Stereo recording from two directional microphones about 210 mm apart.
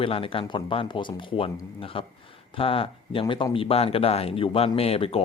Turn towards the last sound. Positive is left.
turn(degrees=25)  # may be behind; listen again after turning